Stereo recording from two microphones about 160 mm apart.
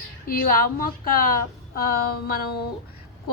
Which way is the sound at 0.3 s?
65° left (ahead or behind).